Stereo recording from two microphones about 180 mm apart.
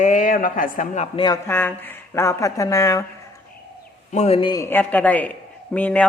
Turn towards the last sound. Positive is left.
turn(degrees=10)  # may be behind; listen again after turning